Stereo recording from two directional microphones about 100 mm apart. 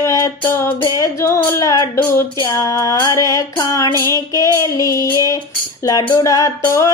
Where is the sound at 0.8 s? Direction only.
35° left (ahead or behind).